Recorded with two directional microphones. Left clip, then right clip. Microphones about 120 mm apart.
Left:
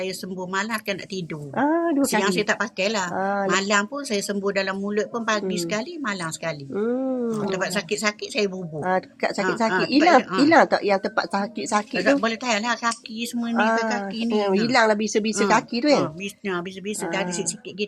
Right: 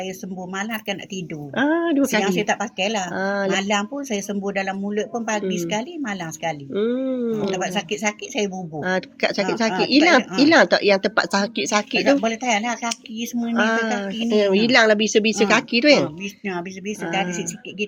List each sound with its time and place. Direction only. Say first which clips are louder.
0.5 s speech: left 1 dB; 25° left (ahead or behind)
1.5 s speech: right 2 dB; 10° right (ahead or behind)
2.2 s speech: right 1 dB; 20° left (ahead or behind)
3.2 s speech: right 2 dB; 10° right (ahead or behind)
3.6 s speech: even; 20° left (ahead or behind)
6.7 s speech: right 1 dB; centre (ahead or behind)
7.5 s speech: right 1 dB; 20° left (ahead or behind)
8.8 s speech: right 1 dB; 5° right (ahead or behind); by 11.5 s 25° right (ahead or behind)
11.5 s speech: right 3 dB; 5° right (ahead or behind)
12.2 s speech: right 2 dB; 20° left (ahead or behind)
13.5 s speech: right 1 dB; 15° right (ahead or behind)
17.1 s speech: right 3 dB; 15° left (ahead or behind)